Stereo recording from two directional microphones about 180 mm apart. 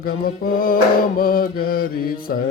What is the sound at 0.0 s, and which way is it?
Mantra, 55° left (ahead or behind).